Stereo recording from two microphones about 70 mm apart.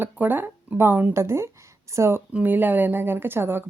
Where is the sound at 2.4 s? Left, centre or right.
Right.